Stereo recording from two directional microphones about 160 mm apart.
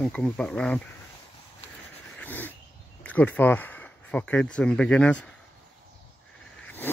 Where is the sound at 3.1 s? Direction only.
10° left (ahead or behind).